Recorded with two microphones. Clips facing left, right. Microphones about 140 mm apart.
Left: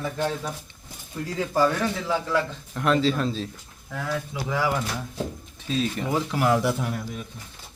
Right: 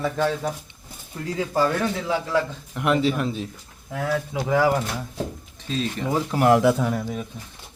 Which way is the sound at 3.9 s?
50° right (ahead or behind).